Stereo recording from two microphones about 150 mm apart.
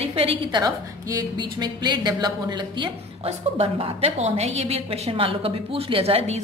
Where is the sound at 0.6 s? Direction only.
25° right (ahead or behind).